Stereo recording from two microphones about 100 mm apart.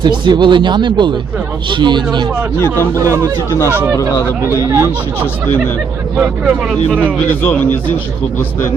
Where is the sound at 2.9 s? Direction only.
30° right (ahead or behind).